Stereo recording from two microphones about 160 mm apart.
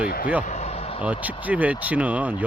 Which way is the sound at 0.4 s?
45° left (ahead or behind).